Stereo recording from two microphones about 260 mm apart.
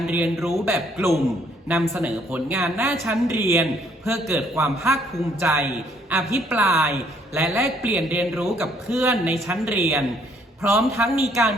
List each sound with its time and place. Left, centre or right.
0.0 s a man's voice: centre